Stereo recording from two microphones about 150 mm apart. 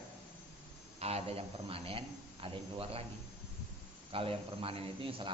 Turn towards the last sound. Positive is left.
turn(degrees=-35)  # may be behind; listen again after turning